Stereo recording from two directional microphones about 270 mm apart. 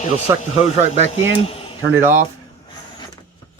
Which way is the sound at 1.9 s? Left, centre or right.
Centre.